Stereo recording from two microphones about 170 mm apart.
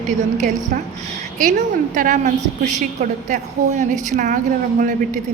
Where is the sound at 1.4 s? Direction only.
50° right (ahead or behind).